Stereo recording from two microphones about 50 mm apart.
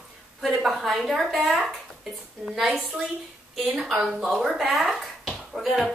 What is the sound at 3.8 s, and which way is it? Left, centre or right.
Speech, centre.